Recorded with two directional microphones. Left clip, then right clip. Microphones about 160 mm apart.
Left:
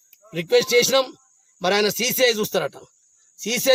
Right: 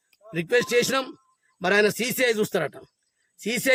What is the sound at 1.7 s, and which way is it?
Speech, 35° right (ahead or behind).